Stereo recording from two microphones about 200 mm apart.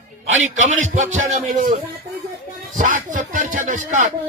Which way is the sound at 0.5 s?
35° right (ahead or behind).